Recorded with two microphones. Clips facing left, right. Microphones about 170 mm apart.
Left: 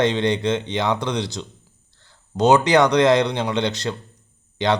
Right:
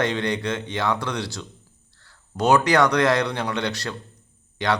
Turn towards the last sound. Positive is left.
turn(degrees=20)  # may be behind; listen again after turning